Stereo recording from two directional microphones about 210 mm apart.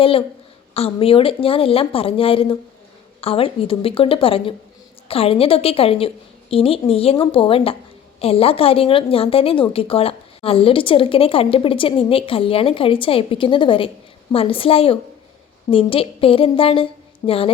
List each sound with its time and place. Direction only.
0.0 s a woman's voice: 25° left (ahead or behind)